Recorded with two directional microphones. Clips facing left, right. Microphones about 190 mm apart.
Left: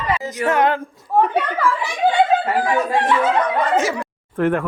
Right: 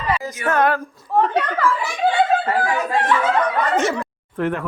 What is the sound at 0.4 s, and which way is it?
Speech, 20° left (ahead or behind).